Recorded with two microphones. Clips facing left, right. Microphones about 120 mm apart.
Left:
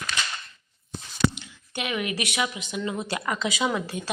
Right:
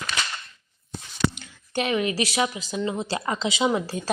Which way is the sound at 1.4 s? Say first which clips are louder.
Right 7 dB; 40° right (ahead or behind).